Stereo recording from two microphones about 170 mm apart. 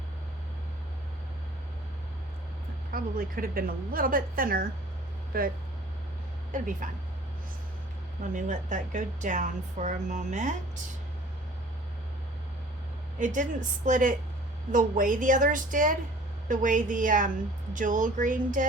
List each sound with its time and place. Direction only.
2.9 s a woman's voice: 60° right (ahead or behind)
6.5 s a woman's voice: 50° right (ahead or behind)
8.2 s a woman's voice: 50° right (ahead or behind)
13.1 s a woman's voice: 50° right (ahead or behind)